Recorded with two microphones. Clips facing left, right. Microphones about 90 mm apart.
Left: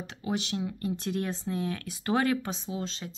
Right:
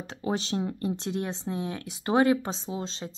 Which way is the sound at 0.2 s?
35° right (ahead or behind).